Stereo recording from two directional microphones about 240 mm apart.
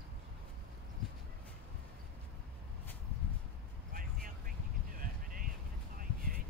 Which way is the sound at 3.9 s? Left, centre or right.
Right.